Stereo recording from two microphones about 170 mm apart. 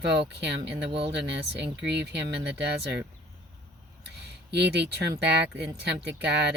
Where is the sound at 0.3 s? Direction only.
85° right.